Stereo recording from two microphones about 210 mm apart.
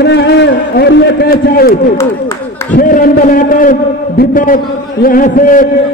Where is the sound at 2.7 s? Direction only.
40° left (ahead or behind).